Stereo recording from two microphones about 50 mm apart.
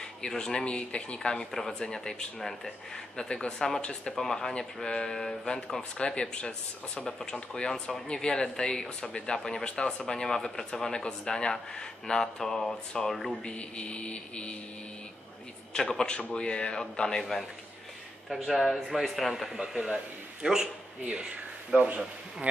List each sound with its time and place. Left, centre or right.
0.2 s speech: centre
1.5 s speech: centre
13.4 s a man's voice: left
15.7 s speech: centre
17.2 s speech: centre
18.3 s speech: centre
18.6 s a man's voice: centre; by 22.5 s right